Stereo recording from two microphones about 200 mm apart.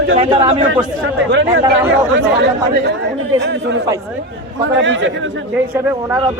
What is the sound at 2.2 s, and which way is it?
Speech, 60° right (ahead or behind).